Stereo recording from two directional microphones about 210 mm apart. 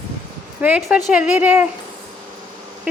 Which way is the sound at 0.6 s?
5° right (ahead or behind).